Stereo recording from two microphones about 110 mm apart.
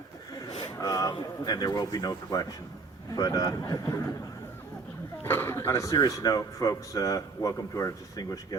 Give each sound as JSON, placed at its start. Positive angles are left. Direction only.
{"t": 0.6, "sound": "a sound", "side_deg": 35}
{"t": 1.1, "sound": "speech", "side_deg": 40}
{"t": 5.2, "sound": "speech", "side_deg": 20}